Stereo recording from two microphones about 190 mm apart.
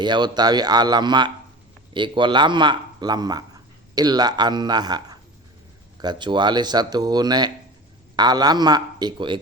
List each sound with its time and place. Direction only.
0.0 s speech: 25° right (ahead or behind)